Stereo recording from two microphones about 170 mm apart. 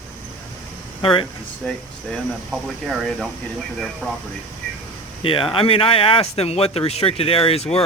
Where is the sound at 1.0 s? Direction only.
30° left (ahead or behind).